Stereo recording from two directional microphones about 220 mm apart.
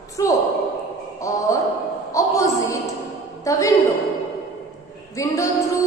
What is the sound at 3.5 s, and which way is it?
Female singing, 15° left (ahead or behind).